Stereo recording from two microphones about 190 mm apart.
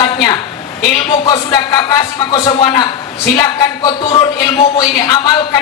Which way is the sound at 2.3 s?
25° left (ahead or behind).